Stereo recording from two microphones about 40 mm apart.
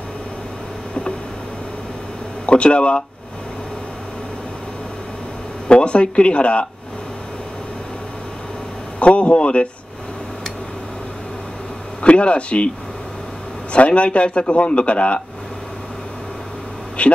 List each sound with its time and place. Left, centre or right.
2.4 s speech: left
5.7 s speech: left
9.0 s speech: left
12.0 s speech: left
13.7 s a man's voice: left
17.0 s a man's voice: left